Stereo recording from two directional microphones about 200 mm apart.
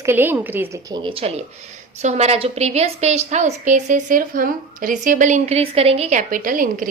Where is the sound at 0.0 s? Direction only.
10° right (ahead or behind).